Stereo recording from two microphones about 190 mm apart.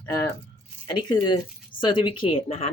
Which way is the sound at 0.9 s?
25° left (ahead or behind).